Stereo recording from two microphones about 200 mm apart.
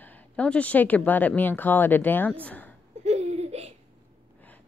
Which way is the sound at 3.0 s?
35° right (ahead or behind).